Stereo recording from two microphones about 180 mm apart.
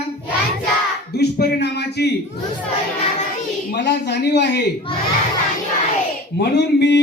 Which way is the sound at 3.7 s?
70° left (ahead or behind).